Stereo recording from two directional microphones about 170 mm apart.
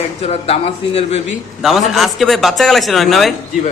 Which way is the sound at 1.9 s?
Centre (ahead or behind).